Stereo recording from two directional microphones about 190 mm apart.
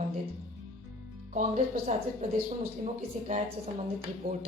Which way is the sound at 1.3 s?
45° right (ahead or behind).